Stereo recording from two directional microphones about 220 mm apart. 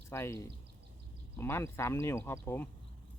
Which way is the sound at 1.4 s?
10° left (ahead or behind).